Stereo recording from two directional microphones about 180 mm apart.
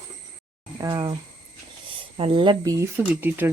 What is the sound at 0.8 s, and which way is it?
Speech, 25° right (ahead or behind).